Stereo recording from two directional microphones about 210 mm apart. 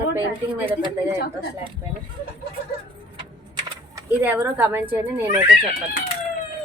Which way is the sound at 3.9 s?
10° right (ahead or behind).